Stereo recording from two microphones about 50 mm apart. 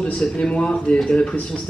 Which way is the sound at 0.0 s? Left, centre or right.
Centre.